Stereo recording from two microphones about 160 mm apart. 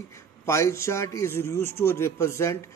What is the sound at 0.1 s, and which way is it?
Speech, 15° left (ahead or behind).